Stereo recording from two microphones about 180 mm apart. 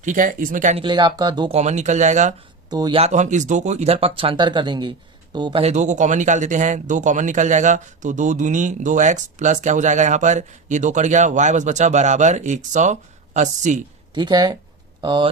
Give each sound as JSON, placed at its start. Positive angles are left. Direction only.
{"t": 0.0, "sound": "speech", "side_deg": -45}
{"t": 0.8, "sound": "speech", "side_deg": -25}
{"t": 1.5, "sound": "speech", "side_deg": -40}
{"t": 2.6, "sound": "speech", "side_deg": -20}
{"t": 3.0, "sound": "speech", "side_deg": -40}
{"t": 14.1, "sound": "speech", "side_deg": -25}